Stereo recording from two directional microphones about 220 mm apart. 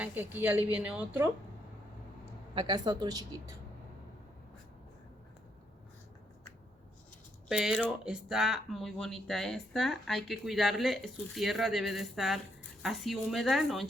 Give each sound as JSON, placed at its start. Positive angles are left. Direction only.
{"t": 0.0, "sound": "speech", "side_deg": -10}
{"t": 2.6, "sound": "speech", "side_deg": -20}
{"t": 7.4, "sound": "speech", "side_deg": -5}